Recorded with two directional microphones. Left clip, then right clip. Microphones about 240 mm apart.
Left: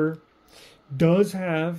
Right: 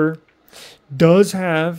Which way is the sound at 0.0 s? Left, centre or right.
Right.